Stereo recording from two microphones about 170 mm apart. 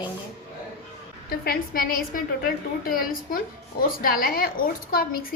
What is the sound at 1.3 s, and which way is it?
A woman's voice, 60° left (ahead or behind).